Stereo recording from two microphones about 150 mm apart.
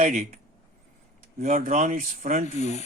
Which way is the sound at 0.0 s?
55° right (ahead or behind).